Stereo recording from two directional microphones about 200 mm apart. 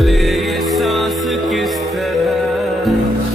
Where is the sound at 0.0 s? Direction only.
Centre (ahead or behind).